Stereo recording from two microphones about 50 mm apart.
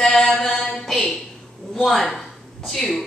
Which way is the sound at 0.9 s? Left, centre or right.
Centre.